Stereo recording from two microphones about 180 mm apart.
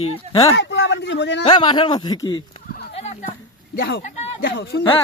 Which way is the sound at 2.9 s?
35° left (ahead or behind).